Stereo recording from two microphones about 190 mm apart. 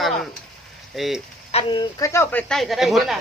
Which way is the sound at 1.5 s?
30° left (ahead or behind).